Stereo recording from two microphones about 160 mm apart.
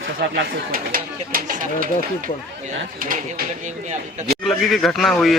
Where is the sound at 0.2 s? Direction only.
70° right (ahead or behind).